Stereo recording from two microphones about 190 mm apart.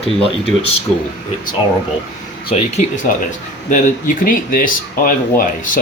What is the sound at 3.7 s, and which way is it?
Speech, 45° left (ahead or behind).